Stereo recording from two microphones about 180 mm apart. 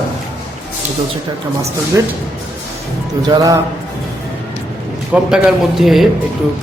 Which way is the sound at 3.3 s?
20° right (ahead or behind).